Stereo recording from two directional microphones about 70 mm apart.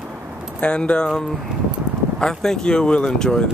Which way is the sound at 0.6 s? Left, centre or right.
Centre.